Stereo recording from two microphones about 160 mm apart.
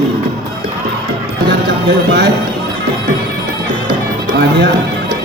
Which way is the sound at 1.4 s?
90° right.